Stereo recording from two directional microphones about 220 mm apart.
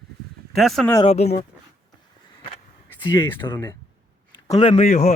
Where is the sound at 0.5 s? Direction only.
Centre (ahead or behind).